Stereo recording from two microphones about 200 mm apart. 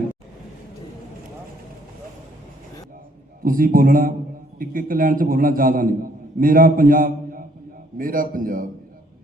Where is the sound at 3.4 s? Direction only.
45° right (ahead or behind).